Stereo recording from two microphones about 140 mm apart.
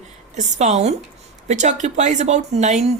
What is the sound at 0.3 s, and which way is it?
A woman's voice, 55° right (ahead or behind).